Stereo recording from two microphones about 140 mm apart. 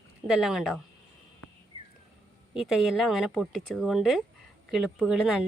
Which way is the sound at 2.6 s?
5° right (ahead or behind).